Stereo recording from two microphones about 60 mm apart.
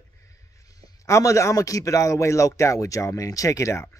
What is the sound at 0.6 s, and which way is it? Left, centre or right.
A man's voice, left.